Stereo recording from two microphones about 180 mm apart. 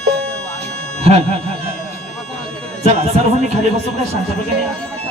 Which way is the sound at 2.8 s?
35° right (ahead or behind).